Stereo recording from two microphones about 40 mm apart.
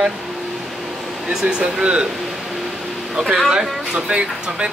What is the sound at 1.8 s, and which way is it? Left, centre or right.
Speech, right.